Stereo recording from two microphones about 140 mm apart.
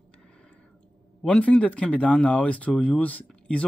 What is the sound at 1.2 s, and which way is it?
Speech, 5° left (ahead or behind).